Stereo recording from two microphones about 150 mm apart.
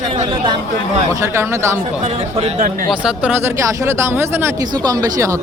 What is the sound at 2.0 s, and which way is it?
Speech, 45° right (ahead or behind).